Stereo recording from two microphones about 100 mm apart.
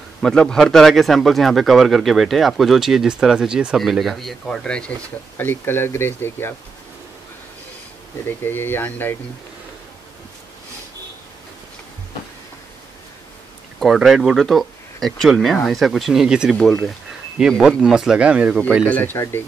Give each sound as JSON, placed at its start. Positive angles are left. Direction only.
{"t": 0.2, "sound": "speech", "side_deg": 5}
{"t": 5.4, "sound": "speech", "side_deg": 20}
{"t": 8.5, "sound": "speech", "side_deg": 20}
{"t": 13.7, "sound": "speech", "side_deg": 0}
{"t": 18.9, "sound": "speech", "side_deg": 20}